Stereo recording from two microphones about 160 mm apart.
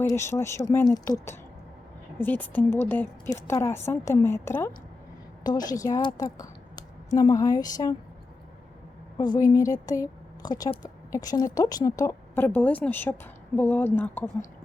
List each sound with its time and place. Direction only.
0.1 s a woman's voice: 15° left (ahead or behind)
2.2 s a woman's voice: 10° left (ahead or behind)
9.1 s a woman's voice: 25° left (ahead or behind)